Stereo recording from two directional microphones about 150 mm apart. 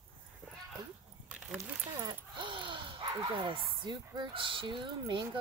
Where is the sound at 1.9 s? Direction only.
30° right (ahead or behind).